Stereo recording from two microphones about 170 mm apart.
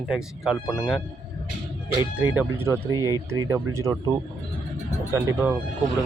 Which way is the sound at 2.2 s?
10° right (ahead or behind).